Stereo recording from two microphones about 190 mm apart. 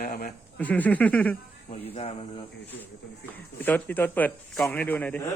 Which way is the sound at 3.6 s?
10° left (ahead or behind).